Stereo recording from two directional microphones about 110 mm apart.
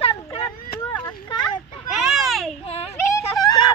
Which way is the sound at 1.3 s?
40° left (ahead or behind).